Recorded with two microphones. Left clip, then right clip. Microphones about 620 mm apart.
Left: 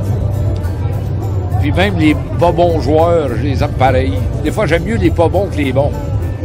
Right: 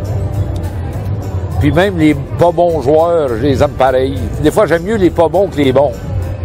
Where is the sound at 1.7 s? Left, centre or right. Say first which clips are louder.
Right 3 dB; right.